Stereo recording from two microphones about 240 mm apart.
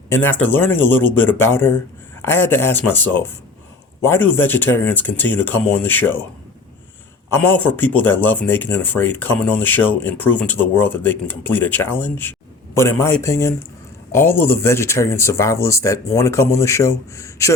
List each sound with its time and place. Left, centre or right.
0.1 s speech: centre
7.3 s speech: centre